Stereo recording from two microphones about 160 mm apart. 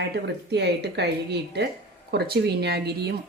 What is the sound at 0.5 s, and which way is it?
Speech, 90° right.